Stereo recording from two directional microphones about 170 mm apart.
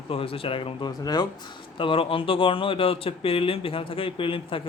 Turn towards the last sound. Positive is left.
turn(degrees=30)  # may be behind; listen again after turning